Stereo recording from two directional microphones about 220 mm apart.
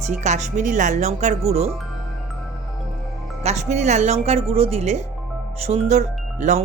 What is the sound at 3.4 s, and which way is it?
Speech, 30° right (ahead or behind).